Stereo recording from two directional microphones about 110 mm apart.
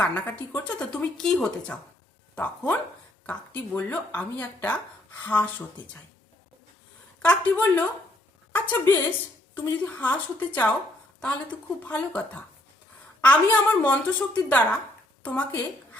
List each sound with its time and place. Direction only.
0.0 s a woman's voice: 20° left (ahead or behind)
0.9 s speech: 5° left (ahead or behind)
7.2 s a woman's voice: 15° left (ahead or behind)